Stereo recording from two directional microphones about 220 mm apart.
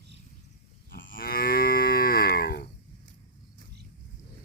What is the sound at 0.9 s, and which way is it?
Livestock, 60° left (ahead or behind).